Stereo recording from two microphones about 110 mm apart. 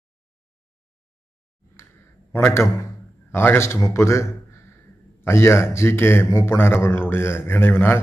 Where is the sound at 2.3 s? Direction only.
25° left (ahead or behind).